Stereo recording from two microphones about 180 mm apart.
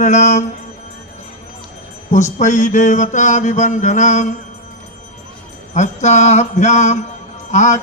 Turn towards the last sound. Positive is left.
turn(degrees=40)  # may be behind; listen again after turning